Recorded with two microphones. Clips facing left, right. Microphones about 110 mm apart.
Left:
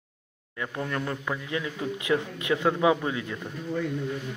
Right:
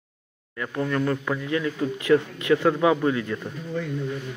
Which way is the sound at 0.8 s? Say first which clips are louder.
Right 7 dB; 15° left (ahead or behind).